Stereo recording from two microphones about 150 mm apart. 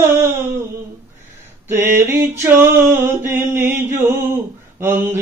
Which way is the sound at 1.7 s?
15° right (ahead or behind).